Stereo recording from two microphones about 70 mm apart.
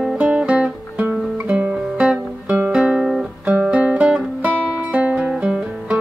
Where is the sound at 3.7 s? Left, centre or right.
Centre.